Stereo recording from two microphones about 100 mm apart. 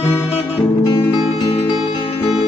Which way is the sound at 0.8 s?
55° left (ahead or behind).